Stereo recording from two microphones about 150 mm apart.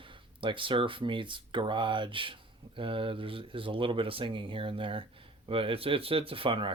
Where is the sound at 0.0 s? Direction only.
35° right (ahead or behind).